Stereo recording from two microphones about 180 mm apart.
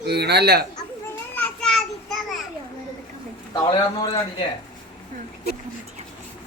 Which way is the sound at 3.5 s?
20° left (ahead or behind).